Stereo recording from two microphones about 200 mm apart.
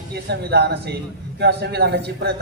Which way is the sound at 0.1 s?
55° right (ahead or behind).